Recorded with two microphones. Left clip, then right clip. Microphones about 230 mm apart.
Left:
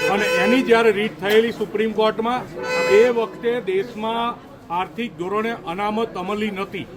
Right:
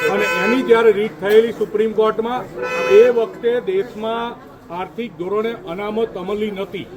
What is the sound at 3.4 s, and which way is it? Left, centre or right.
Speech, left.